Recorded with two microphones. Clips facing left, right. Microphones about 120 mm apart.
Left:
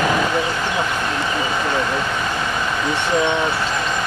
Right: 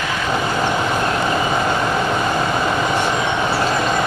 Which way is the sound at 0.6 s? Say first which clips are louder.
Right 3 dB; 25° right (ahead or behind).